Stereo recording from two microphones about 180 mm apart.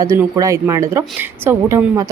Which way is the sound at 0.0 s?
20° right (ahead or behind).